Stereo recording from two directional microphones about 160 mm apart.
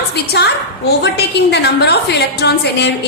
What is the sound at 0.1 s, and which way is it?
A woman's voice, 90° left.